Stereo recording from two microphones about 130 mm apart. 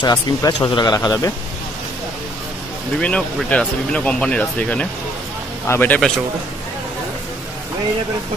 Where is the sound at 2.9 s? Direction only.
10° left (ahead or behind).